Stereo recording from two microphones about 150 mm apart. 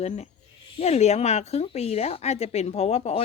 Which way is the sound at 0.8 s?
45° left (ahead or behind).